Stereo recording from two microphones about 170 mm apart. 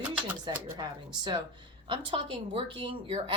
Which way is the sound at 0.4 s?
25° right (ahead or behind).